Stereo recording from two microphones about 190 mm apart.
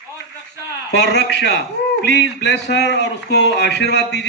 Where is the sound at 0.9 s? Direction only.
65° left (ahead or behind).